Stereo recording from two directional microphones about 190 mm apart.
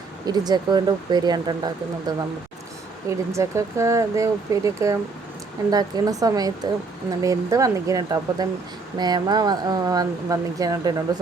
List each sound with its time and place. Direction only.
0.3 s speech: 20° right (ahead or behind)